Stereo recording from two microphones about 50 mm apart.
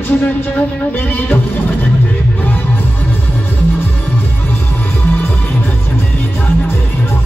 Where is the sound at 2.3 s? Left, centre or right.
Left.